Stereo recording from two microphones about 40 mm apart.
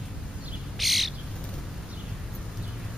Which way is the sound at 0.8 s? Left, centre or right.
Centre.